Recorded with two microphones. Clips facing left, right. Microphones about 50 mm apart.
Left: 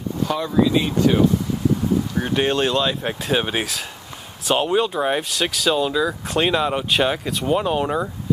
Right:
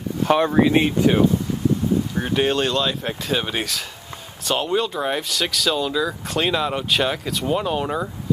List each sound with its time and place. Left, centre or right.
0.2 s speech: right
1.1 s speech: right
2.1 s speech: centre